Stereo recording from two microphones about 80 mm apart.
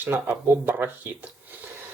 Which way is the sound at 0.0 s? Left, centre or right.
Right.